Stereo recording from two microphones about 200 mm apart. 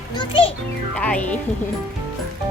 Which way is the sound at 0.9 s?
5° left (ahead or behind).